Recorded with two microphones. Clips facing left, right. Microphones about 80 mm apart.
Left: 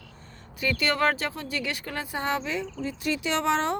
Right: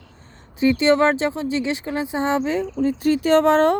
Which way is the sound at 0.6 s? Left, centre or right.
Right.